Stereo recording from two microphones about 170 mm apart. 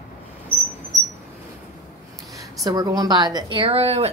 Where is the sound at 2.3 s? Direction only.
20° right (ahead or behind).